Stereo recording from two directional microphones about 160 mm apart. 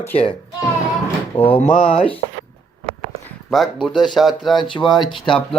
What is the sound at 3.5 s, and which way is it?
Speech, centre (ahead or behind).